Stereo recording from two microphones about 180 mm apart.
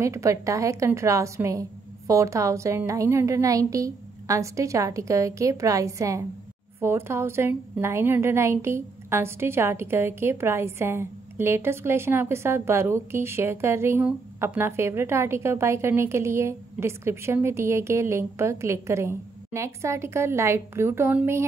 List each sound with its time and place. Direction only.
0.0 s a woman's voice: 15° right (ahead or behind)